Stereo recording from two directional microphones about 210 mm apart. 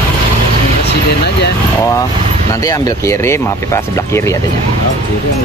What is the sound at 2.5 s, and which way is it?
Speech, 15° left (ahead or behind).